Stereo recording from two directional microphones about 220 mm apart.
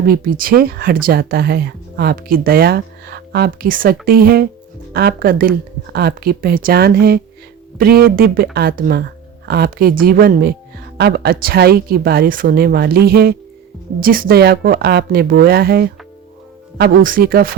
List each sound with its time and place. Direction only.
0.0 s speech: 40° right (ahead or behind)